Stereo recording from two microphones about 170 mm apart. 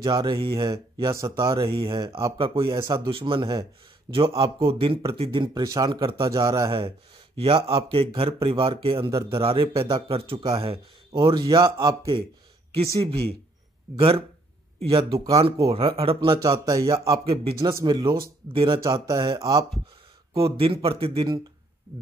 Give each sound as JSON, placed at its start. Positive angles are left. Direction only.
{"t": 0.0, "sound": "speech", "side_deg": -25}
{"t": 2.3, "sound": "speech", "side_deg": -30}
{"t": 13.9, "sound": "speech", "side_deg": -35}
{"t": 15.1, "sound": "speech", "side_deg": -20}
{"t": 15.7, "sound": "speech", "side_deg": -35}
{"t": 17.2, "sound": "speech", "side_deg": -35}